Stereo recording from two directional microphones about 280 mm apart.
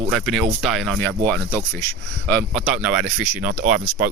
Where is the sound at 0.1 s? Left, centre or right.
Centre.